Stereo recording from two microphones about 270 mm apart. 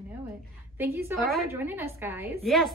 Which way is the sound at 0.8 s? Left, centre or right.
Centre.